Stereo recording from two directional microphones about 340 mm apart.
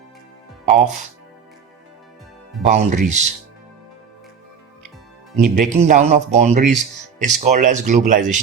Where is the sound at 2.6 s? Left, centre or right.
Right.